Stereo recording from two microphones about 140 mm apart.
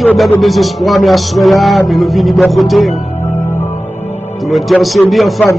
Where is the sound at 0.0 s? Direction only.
Centre (ahead or behind).